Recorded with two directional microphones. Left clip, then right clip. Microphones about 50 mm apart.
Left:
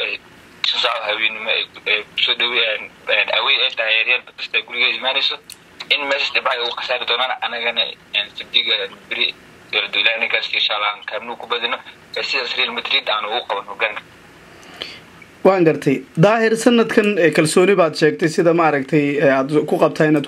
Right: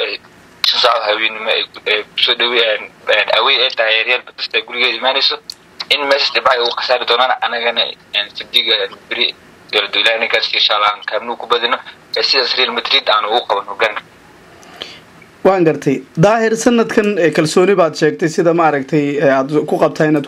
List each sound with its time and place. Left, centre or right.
0.8 s speech: right
14.7 s a sound: centre
15.4 s speech: centre